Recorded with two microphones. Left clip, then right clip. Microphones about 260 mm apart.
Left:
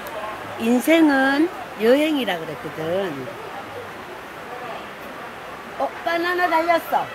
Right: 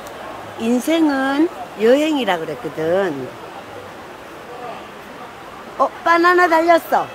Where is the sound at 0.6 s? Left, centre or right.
Centre.